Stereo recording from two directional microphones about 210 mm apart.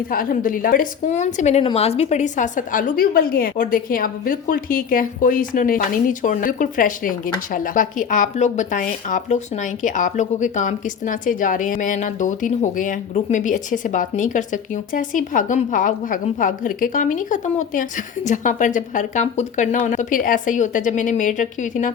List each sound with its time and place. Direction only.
0.1 s a woman's voice: 40° left (ahead or behind)